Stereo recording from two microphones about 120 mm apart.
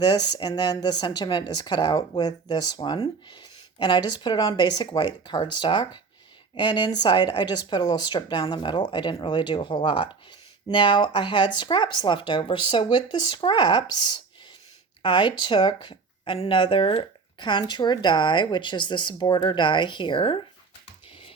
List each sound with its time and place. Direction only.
0.0 s speech: 35° left (ahead or behind)
15.0 s speech: 40° left (ahead or behind)